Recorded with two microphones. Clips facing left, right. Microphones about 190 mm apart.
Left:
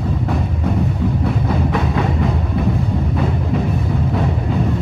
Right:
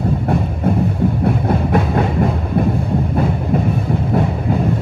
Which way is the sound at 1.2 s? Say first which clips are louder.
Right 2 dB; 55° right (ahead or behind).